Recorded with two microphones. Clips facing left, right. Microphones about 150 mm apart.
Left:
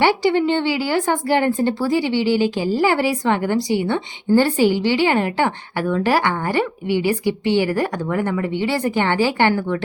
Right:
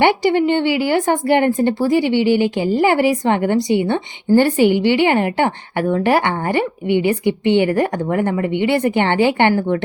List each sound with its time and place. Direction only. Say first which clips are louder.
0.0 s a woman's voice: right 2 dB; 55° right (ahead or behind)